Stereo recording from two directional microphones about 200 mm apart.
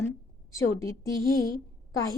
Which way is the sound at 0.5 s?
15° left (ahead or behind).